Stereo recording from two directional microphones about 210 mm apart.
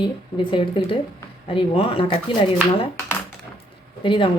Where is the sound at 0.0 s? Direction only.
25° left (ahead or behind).